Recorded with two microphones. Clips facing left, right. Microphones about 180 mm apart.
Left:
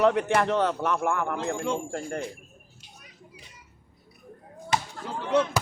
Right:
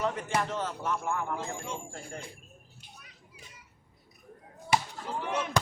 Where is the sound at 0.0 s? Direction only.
70° left (ahead or behind).